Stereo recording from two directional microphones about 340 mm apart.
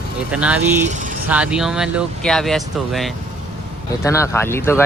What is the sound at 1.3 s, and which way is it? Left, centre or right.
Speech, centre.